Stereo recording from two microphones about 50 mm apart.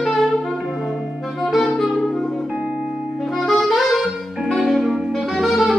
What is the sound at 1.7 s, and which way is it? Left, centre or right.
Music, centre.